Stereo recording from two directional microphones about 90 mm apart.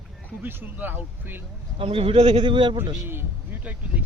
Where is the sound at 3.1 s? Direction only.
20° right (ahead or behind).